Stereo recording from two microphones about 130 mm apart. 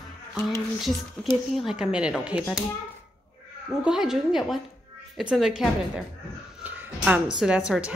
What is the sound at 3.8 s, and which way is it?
A woman's voice, 5° right (ahead or behind).